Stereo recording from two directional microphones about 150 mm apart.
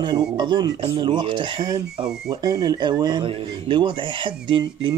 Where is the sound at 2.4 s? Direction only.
25° right (ahead or behind).